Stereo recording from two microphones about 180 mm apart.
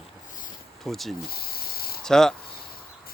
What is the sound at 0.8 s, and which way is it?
Speech, centre (ahead or behind).